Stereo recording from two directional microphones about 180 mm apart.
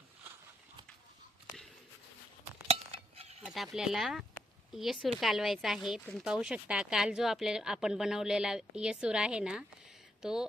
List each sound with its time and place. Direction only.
2.6 s cutlery: 35° right (ahead or behind)
3.4 s speech: centre (ahead or behind)